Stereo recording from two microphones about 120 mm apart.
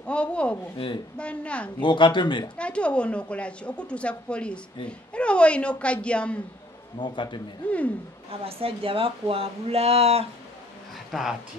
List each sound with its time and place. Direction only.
0.0 s a woman's voice: 10° left (ahead or behind)
1.8 s speech: 40° left (ahead or behind)
2.5 s a woman's voice: 10° left (ahead or behind)
7.0 s speech: 40° left (ahead or behind)
7.6 s a woman's voice: 10° left (ahead or behind)
8.3 s speech: 55° right (ahead or behind)
11.1 s speech: centre (ahead or behind)